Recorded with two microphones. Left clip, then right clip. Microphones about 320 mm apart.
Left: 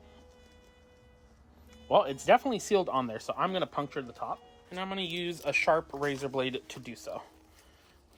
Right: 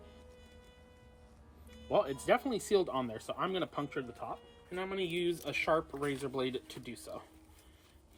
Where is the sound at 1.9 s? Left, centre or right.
Centre.